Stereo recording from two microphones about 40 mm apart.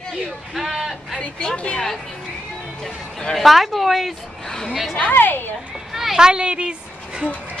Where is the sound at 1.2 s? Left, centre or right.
Left.